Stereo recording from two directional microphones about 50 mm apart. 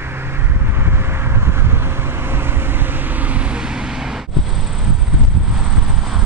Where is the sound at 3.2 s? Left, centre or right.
Right.